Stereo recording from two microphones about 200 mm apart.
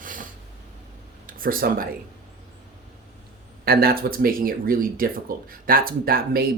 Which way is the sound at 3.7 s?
50° right (ahead or behind).